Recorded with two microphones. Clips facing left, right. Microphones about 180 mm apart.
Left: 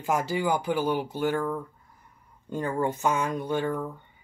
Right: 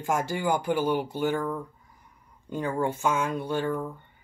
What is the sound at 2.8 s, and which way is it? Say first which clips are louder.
Speech: even; 10° right (ahead or behind).